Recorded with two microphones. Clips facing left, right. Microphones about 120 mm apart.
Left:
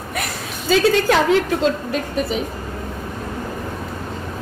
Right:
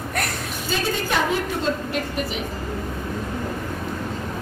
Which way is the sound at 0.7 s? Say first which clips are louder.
Left 9 dB; 90° left.